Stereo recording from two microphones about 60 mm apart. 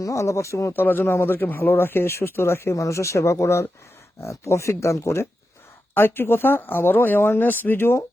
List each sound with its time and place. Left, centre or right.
0.0 s speech: left
0.7 s speech: left
2.7 s speech: left
5.9 s speech: left